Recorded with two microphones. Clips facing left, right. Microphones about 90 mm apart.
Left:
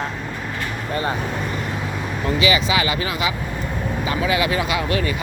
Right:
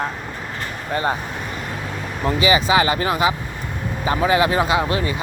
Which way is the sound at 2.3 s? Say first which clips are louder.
Right 2 dB; 35° right (ahead or behind).